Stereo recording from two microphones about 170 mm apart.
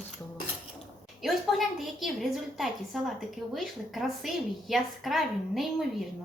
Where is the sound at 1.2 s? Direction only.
Centre (ahead or behind).